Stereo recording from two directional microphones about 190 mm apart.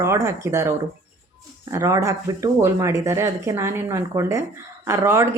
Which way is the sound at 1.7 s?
15° right (ahead or behind).